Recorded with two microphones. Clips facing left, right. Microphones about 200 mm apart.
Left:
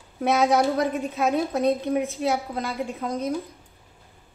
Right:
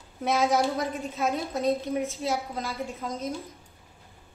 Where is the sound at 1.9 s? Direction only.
15° left (ahead or behind).